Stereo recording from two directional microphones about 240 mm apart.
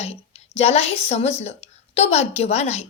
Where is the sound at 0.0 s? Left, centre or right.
Left.